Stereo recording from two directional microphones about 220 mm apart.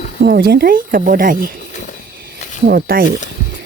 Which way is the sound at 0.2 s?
45° right (ahead or behind).